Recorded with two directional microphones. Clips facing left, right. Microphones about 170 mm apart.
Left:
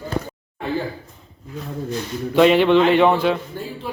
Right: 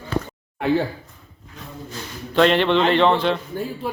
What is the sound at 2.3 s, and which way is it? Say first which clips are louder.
A man's voice: left 3 dB; 10° left (ahead or behind).